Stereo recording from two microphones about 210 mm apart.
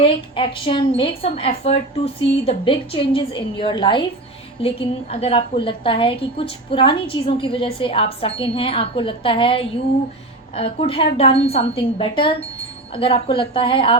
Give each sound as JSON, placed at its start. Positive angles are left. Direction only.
{"t": 0.0, "sound": "a woman's voice", "side_deg": 25}